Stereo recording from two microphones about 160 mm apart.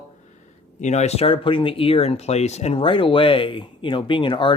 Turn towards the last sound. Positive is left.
turn(degrees=30)  # may be behind; listen again after turning